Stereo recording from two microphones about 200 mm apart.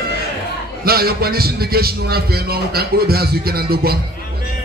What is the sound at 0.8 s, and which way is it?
A man's voice, 50° right (ahead or behind).